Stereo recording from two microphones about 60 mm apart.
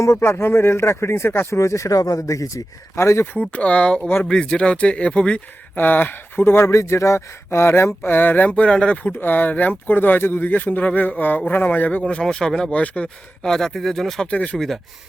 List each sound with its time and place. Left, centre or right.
0.0 s speech: left
1.5 s speech: left
3.0 s speech: left
3.5 s speech: left
5.7 s speech: left
6.4 s speech: left; by 9.1 s centre
9.1 s speech: left
12.0 s speech: centre
12.7 s speech: left
13.4 s speech: centre
14.3 s speech: centre